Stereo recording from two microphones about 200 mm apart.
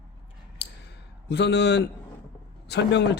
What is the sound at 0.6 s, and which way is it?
Clicking, 60° left (ahead or behind).